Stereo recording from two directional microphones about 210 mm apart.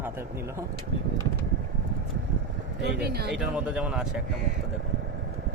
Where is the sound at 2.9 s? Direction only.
50° right (ahead or behind).